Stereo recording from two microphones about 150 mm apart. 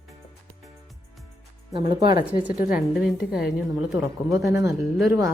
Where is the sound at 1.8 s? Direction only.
35° right (ahead or behind).